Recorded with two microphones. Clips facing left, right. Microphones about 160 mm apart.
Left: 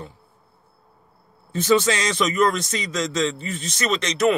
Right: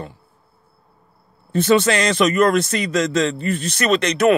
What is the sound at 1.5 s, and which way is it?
A man's voice, 65° right (ahead or behind).